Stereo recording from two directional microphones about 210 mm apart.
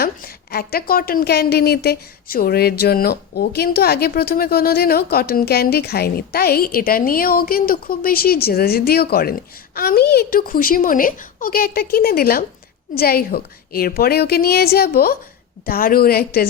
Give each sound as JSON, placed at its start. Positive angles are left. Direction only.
{"t": 0.0, "sound": "a woman's voice", "side_deg": 45}